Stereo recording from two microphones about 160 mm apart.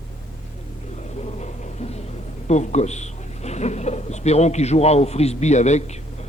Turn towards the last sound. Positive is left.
turn(degrees=45)  # may be behind; listen again after turning